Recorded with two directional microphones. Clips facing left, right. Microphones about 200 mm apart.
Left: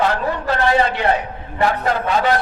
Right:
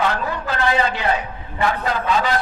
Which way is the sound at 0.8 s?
55° left (ahead or behind).